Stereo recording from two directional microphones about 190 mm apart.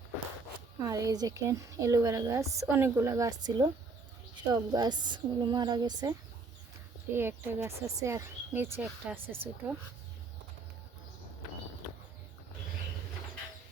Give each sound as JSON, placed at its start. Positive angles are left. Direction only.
{"t": 0.9, "sound": "a woman's voice", "side_deg": -20}